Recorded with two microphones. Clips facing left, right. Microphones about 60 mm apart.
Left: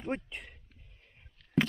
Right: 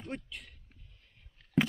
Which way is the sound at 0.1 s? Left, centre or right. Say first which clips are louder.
Left 6 dB; left.